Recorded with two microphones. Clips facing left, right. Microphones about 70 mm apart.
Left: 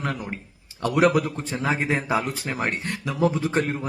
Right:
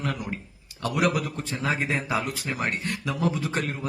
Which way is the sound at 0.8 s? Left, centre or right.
Left.